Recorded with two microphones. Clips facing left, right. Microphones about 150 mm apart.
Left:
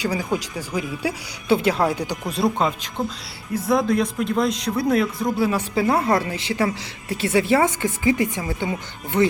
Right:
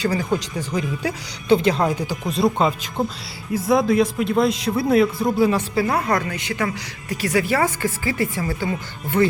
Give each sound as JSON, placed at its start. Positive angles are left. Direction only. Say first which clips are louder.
{"t": 0.0, "sound": "speech", "louder": "right 2 dB", "side_deg": 10}
{"t": 5.5, "sound": "speech", "louder": "right 1 dB", "side_deg": 10}
{"t": 5.9, "sound": "a woman's voice", "louder": "left 2 dB", "side_deg": 25}